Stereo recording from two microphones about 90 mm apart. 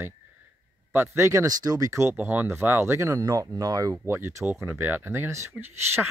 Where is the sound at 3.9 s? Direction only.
25° right (ahead or behind).